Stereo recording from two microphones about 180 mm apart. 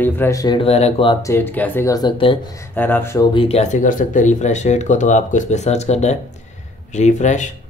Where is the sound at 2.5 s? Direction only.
10° left (ahead or behind).